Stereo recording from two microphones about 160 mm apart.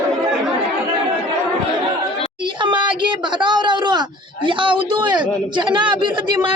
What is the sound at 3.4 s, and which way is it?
A man's voice, 30° right (ahead or behind).